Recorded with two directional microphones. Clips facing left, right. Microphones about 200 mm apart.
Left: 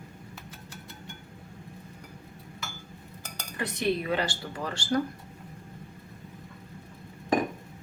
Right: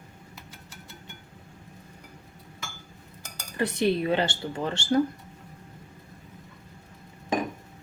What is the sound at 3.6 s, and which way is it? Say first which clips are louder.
Speech: right 4 dB; 30° right (ahead or behind).